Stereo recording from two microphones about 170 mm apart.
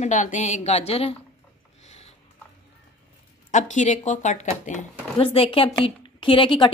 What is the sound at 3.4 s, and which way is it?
Speech, 45° left (ahead or behind).